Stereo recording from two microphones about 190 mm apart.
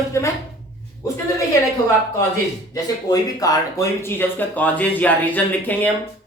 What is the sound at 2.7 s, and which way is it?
Speech, 20° left (ahead or behind).